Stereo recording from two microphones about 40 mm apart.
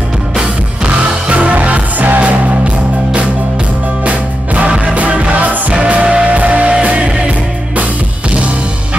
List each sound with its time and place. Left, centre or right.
1.3 s music: right
4.0 s music: right